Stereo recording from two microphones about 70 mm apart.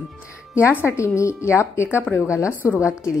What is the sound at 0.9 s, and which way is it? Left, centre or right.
A woman's voice, left.